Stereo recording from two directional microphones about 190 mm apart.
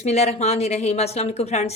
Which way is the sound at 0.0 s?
35° left (ahead or behind).